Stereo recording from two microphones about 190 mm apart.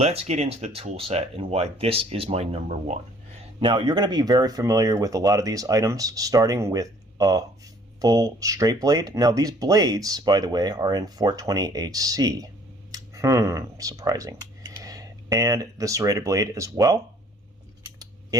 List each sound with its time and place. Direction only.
0.0 s speech: 35° right (ahead or behind)
3.6 s speech: 25° right (ahead or behind)